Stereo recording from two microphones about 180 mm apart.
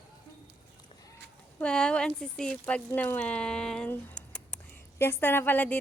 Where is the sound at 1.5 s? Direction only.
5° left (ahead or behind).